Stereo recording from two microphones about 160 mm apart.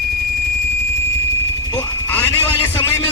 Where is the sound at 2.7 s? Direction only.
15° left (ahead or behind).